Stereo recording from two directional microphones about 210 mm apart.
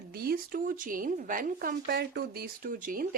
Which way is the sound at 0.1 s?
45° right (ahead or behind).